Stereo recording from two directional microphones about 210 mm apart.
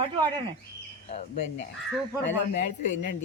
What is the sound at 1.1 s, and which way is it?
Speech, 35° left (ahead or behind).